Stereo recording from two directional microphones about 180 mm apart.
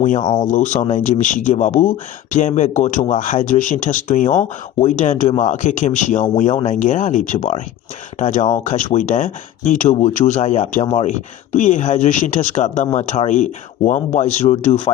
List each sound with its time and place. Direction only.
0.0 s speech: 45° left (ahead or behind)